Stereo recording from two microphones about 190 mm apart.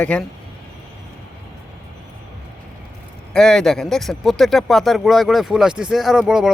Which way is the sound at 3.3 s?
5° left (ahead or behind).